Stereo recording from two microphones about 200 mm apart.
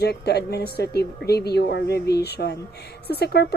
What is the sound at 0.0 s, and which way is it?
A woman's voice, 55° left (ahead or behind).